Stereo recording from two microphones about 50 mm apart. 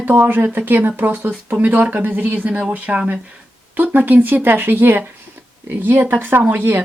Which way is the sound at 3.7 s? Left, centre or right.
Right.